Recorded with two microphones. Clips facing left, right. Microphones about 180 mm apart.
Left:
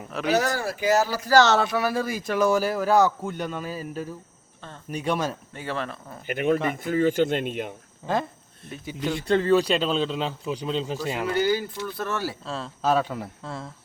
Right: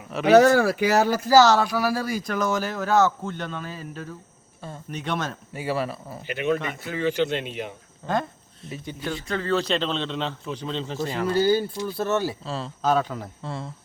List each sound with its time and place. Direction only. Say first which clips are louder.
0.3 s speech: right 12 dB; 60° right (ahead or behind)
1.3 s speech: right 2 dB; centre (ahead or behind)
5.5 s speech: right 9 dB; 10° right (ahead or behind)
6.2 s speech: left 2 dB; 50° left (ahead or behind)
8.0 s speech: even; 10° left (ahead or behind)
11.3 s speech: right 3 dB; 30° right (ahead or behind)
12.5 s speech: left 3 dB; centre (ahead or behind)